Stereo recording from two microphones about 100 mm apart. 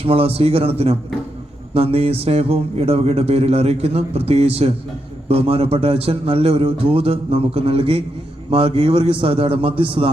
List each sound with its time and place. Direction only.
0.0 s speech: 75° right (ahead or behind)
5.3 s a man's voice: 75° right (ahead or behind)